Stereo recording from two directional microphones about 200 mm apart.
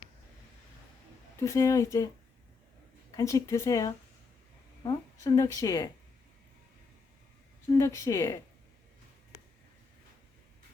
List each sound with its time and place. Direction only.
1.4 s speech: 15° left (ahead or behind)
3.2 s a woman's voice: 15° left (ahead or behind)
7.7 s speech: 15° left (ahead or behind)